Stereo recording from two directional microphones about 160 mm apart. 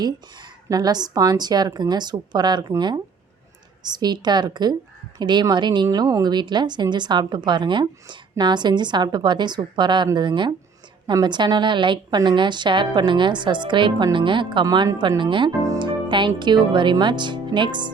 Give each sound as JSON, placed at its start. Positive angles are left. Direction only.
{"t": 0.0, "sound": "a woman's voice", "side_deg": -25}